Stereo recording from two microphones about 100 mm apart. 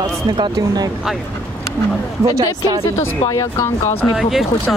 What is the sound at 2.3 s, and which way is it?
Speech, 40° right (ahead or behind).